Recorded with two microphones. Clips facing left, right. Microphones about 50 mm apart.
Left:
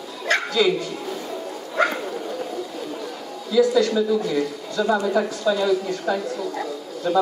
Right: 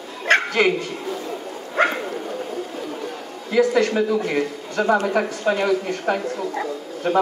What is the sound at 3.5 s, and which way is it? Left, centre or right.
A man's voice, right.